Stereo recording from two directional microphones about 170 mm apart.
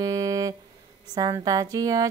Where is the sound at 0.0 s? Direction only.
20° right (ahead or behind).